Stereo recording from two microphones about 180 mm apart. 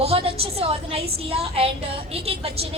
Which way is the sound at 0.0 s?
35° right (ahead or behind).